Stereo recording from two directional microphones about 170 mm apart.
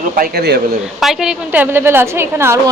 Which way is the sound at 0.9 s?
Centre (ahead or behind).